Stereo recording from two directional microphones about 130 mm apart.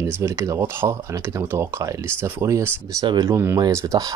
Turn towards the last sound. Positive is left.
turn(degrees=-25)  # may be behind; listen again after turning